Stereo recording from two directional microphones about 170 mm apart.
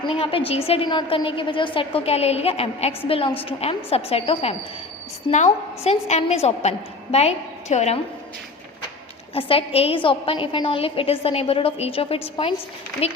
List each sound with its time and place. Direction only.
0.1 s a woman's voice: 30° left (ahead or behind)
9.3 s a woman's voice: 35° left (ahead or behind)